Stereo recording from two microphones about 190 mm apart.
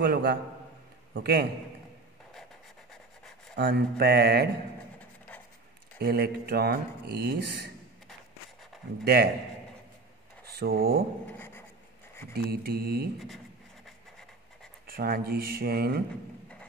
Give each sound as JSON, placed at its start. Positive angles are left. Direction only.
{"t": 0.0, "sound": "speech", "side_deg": -50}
{"t": 2.9, "sound": "rub", "side_deg": 5}
{"t": 3.5, "sound": "speech", "side_deg": -60}
{"t": 5.9, "sound": "speech", "side_deg": -55}
{"t": 9.0, "sound": "speech", "side_deg": -50}
{"t": 10.4, "sound": "speech", "side_deg": -55}
{"t": 11.3, "sound": "writing", "side_deg": 10}
{"t": 12.4, "sound": "speech", "side_deg": -55}
{"t": 14.9, "sound": "speech", "side_deg": -50}